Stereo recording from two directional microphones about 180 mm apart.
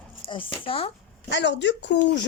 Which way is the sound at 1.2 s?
75° left (ahead or behind).